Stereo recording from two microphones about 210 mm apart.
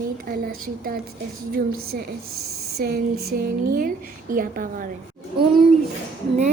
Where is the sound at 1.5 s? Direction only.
45° right (ahead or behind).